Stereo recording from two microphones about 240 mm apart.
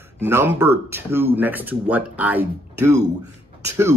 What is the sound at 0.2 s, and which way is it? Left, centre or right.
A man's voice, centre.